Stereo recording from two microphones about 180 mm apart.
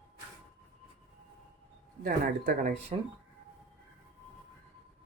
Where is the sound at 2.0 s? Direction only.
55° right (ahead or behind).